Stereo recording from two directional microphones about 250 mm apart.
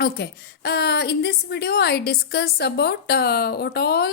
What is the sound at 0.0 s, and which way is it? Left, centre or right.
A woman's voice, left.